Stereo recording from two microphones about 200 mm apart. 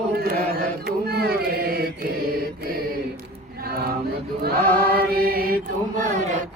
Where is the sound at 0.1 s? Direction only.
50° right (ahead or behind).